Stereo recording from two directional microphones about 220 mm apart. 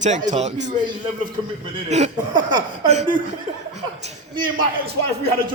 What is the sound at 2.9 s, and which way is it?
Speech, 30° right (ahead or behind).